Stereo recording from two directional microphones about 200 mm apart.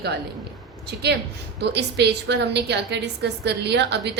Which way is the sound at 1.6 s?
55° right (ahead or behind).